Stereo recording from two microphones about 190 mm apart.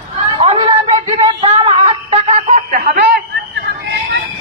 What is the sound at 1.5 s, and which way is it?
Snicker, 30° right (ahead or behind).